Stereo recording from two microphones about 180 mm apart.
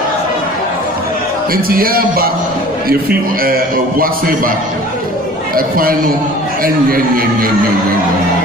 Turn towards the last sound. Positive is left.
turn(degrees=-55)  # may be behind; listen again after turning